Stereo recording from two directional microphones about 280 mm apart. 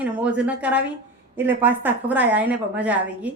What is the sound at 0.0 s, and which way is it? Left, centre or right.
A woman's voice, centre.